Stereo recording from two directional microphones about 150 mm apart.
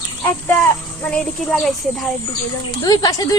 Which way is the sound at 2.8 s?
25° left (ahead or behind).